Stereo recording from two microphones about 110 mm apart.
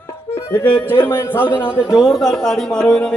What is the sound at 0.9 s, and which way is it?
Speech, 20° left (ahead or behind).